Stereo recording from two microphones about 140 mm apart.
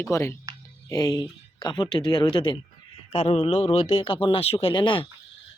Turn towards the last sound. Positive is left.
turn(degrees=35)  # may be behind; listen again after turning